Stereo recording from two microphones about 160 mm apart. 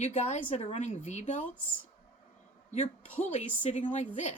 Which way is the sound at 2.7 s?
40° left (ahead or behind).